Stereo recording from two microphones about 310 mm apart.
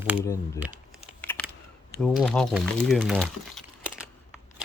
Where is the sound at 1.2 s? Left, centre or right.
Centre.